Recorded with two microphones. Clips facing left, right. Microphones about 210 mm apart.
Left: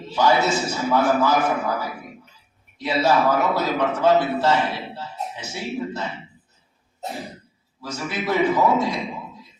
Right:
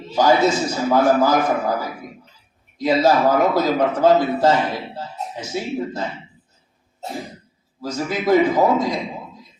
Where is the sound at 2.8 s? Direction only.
40° right (ahead or behind).